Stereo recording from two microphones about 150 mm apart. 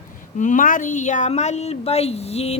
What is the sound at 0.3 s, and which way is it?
A woman's voice, 60° left (ahead or behind).